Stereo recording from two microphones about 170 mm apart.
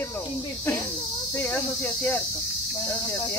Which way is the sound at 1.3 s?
15° left (ahead or behind).